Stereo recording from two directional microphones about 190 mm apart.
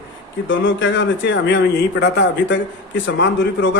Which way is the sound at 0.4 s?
80° left.